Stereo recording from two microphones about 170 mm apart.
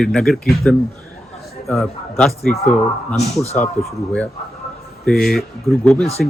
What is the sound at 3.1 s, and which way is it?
Speech, 40° left (ahead or behind).